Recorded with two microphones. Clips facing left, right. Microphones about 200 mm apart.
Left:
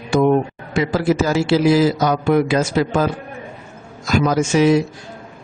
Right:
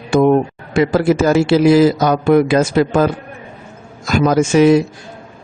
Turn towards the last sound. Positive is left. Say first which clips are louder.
# right 4 dB
turn(degrees=-55)  # may be behind; listen again after turning